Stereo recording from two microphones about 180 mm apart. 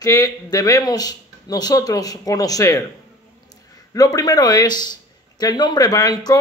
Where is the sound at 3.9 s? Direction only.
20° left (ahead or behind).